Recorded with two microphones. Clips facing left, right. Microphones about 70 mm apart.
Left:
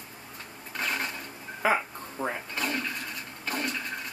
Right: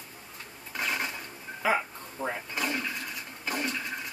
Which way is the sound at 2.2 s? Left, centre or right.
Left.